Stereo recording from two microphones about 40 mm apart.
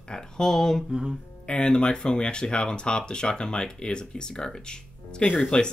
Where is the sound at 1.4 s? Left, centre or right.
Left.